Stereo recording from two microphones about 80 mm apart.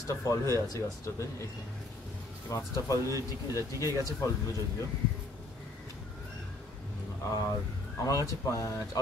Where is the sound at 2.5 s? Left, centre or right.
Left.